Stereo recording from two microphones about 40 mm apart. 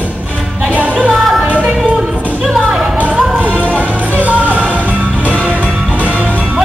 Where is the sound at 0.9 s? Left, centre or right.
Centre.